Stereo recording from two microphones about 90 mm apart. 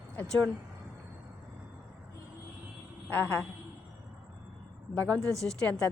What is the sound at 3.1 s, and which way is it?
Speech, 20° left (ahead or behind).